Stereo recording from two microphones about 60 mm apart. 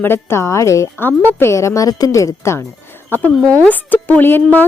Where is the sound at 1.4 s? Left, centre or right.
Left.